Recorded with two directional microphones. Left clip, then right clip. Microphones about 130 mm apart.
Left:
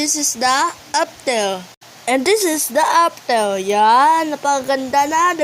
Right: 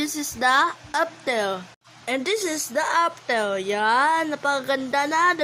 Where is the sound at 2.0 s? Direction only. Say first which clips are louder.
Left 9 dB; 50° left (ahead or behind).